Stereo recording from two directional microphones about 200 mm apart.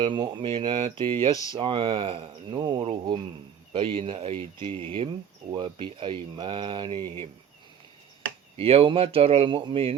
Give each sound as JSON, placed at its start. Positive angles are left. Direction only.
{"t": 0.0, "sound": "speech", "side_deg": -25}
{"t": 8.5, "sound": "speech", "side_deg": -30}